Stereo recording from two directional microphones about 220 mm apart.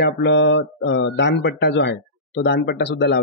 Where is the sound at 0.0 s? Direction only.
50° left (ahead or behind).